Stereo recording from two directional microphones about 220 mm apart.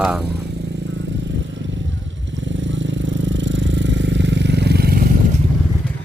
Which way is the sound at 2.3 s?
55° right (ahead or behind).